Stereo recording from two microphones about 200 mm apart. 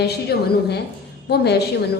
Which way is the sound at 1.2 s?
55° left (ahead or behind).